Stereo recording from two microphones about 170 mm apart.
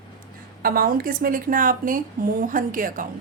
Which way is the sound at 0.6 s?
55° right (ahead or behind).